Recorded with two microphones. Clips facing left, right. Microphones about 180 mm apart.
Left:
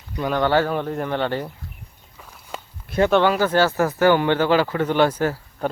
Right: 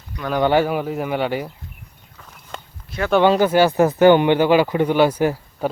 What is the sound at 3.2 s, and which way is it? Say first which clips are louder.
Speech: right 3 dB; 15° right (ahead or behind).